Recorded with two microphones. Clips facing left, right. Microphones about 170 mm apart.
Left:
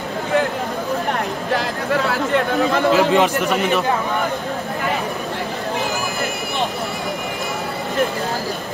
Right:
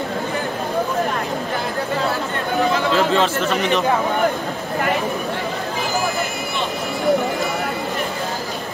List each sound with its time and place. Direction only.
2.0 s speech: 85° left
2.9 s speech: 15° left (ahead or behind)